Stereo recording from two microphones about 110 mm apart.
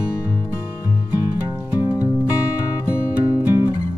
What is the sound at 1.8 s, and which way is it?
Music, 35° left (ahead or behind).